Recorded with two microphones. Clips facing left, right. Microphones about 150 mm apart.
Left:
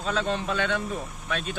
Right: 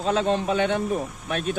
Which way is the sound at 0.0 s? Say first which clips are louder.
Right 5 dB; 55° right (ahead or behind).